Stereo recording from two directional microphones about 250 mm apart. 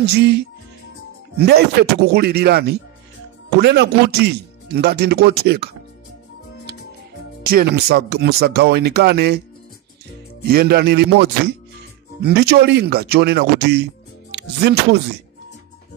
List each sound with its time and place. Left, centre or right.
0.0 s speech: right
7.4 s speech: right
10.4 s speech: right